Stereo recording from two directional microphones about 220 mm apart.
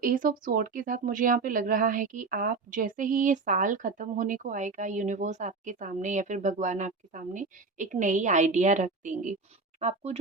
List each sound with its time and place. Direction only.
0.0 s a woman's voice: 40° right (ahead or behind)